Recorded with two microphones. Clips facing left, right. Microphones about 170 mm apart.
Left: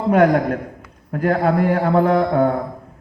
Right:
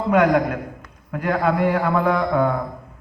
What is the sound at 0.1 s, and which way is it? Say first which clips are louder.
A man's voice: left 2 dB; 45° left (ahead or behind).